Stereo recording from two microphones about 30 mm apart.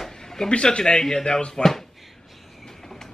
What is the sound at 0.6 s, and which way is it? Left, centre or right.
Speech, left.